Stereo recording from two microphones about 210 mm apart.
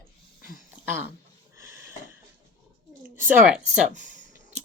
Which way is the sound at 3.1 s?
10° right (ahead or behind).